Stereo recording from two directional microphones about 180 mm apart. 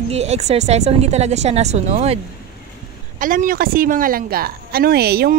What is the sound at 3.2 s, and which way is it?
Speech, 50° right (ahead or behind).